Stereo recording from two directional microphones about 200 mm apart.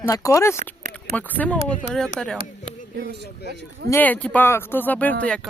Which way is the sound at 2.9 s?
55° right (ahead or behind).